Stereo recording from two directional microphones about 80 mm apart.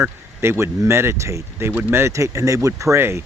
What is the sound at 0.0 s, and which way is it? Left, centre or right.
Speech, right.